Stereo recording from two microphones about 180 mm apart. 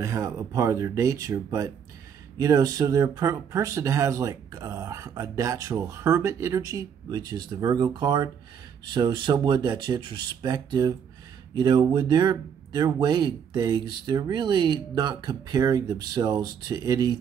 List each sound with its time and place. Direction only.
0.0 s speech: 15° right (ahead or behind)